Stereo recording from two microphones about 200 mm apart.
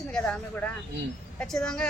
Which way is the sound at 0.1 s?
5° left (ahead or behind).